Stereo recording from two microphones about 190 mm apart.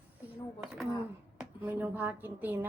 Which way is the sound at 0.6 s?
Centre (ahead or behind).